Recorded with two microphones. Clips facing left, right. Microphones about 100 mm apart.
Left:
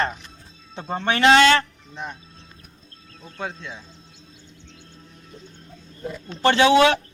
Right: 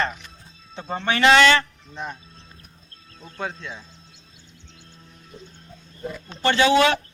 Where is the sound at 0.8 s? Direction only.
Centre (ahead or behind).